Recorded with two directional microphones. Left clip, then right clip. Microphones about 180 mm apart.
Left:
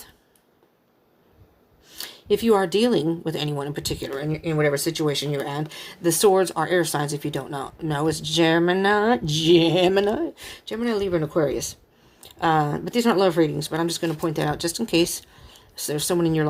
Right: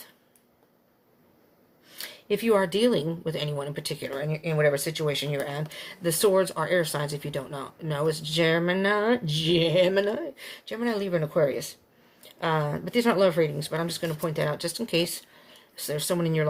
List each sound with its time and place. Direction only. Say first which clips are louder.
1.9 s speech: left 6 dB; 45° left (ahead or behind)